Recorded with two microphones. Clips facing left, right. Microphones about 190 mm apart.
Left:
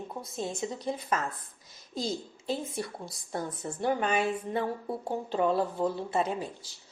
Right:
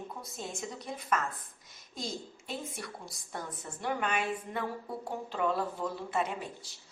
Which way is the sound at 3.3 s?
30° left (ahead or behind).